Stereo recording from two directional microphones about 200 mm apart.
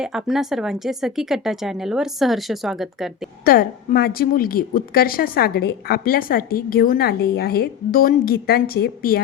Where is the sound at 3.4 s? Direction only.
45° left (ahead or behind).